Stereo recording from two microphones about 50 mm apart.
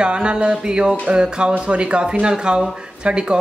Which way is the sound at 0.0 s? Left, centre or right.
Centre.